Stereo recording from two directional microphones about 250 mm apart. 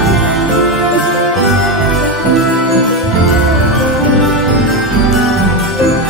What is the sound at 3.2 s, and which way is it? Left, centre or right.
Music, centre.